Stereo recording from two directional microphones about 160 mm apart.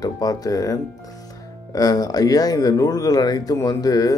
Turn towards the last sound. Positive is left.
turn(degrees=20)  # may be behind; listen again after turning